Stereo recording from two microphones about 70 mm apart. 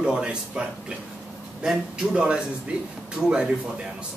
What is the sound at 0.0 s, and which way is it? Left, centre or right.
Speech, centre.